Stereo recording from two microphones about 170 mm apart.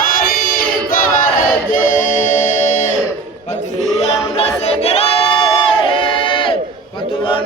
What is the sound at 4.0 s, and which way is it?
Singing, 35° left (ahead or behind).